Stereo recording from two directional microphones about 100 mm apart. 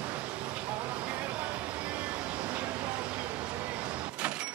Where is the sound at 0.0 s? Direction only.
15° right (ahead or behind).